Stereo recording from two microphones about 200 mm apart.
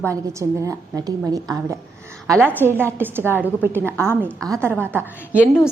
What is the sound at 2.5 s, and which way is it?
A woman's voice, 10° right (ahead or behind).